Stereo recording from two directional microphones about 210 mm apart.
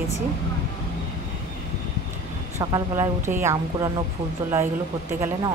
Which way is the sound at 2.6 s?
15° right (ahead or behind).